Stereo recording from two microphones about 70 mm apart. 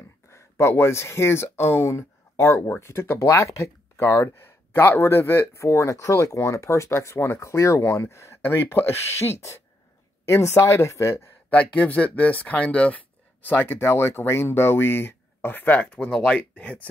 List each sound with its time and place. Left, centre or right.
0.3 s speech: left
11.5 s speech: centre
13.5 s speech: left